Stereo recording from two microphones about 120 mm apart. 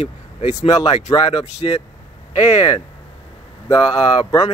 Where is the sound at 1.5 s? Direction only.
65° left (ahead or behind).